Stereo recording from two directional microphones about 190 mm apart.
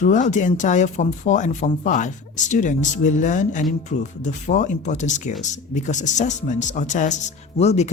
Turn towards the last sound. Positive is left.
turn(degrees=35)  # may be behind; listen again after turning